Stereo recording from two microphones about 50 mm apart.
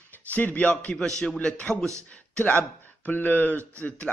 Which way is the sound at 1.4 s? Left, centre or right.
Centre.